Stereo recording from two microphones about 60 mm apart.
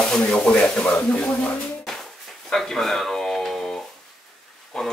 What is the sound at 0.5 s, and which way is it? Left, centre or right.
Speech, centre.